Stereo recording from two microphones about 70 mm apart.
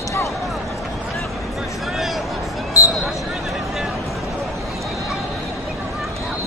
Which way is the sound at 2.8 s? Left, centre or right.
Left.